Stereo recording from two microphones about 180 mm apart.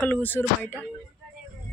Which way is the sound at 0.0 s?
10° left (ahead or behind).